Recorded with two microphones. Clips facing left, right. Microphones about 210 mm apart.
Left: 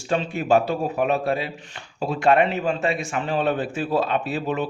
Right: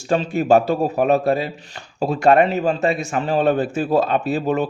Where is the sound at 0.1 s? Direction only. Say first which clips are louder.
Right 4 dB; 40° right (ahead or behind).